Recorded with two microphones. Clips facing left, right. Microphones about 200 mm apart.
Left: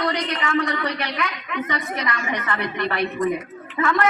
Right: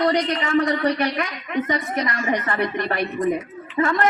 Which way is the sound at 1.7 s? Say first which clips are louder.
Right 3 dB; 40° right (ahead or behind).